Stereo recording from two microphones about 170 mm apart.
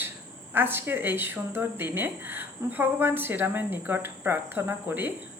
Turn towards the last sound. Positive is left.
turn(degrees=-10)  # may be behind; listen again after turning